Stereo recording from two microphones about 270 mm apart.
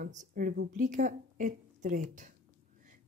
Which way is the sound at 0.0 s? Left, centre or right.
Right.